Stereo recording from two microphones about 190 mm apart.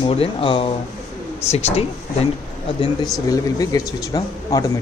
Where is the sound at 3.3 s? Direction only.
20° left (ahead or behind).